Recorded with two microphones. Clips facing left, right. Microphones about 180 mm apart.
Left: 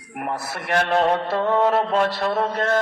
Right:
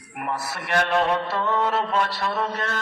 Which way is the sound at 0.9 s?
45° left (ahead or behind).